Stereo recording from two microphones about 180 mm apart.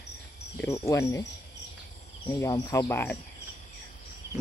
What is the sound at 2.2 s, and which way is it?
Speech, 20° left (ahead or behind).